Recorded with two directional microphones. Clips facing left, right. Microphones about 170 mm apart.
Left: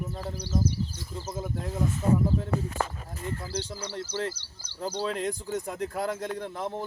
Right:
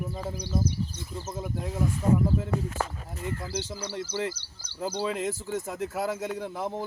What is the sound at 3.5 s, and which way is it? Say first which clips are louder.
Speech: right 1 dB; 10° right (ahead or behind).